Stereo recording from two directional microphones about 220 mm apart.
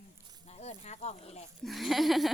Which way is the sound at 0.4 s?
30° left (ahead or behind).